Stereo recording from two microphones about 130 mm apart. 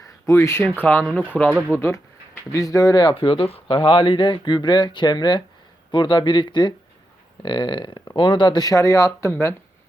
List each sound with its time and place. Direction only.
0.3 s speech: 20° left (ahead or behind)
1.7 s speech: 20° left (ahead or behind)